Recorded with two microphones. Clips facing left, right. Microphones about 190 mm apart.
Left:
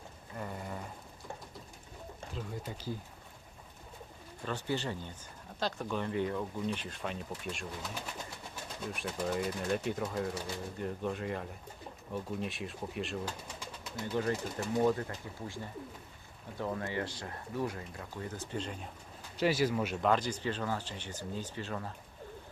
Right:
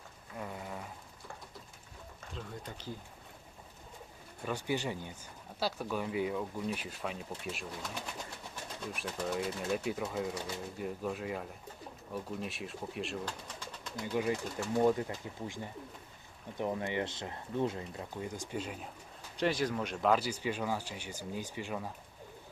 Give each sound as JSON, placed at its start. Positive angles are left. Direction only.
{"t": 0.3, "sound": "a sound", "side_deg": 0}
{"t": 2.3, "sound": "speech", "side_deg": 10}
{"t": 4.4, "sound": "speech", "side_deg": -10}
{"t": 14.0, "sound": "speech", "side_deg": -10}
{"t": 19.4, "sound": "speech", "side_deg": 5}